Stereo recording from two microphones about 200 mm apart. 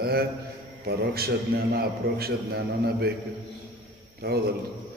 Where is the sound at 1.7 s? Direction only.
50° right (ahead or behind).